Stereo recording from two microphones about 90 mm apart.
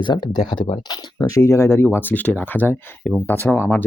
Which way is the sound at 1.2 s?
35° left (ahead or behind).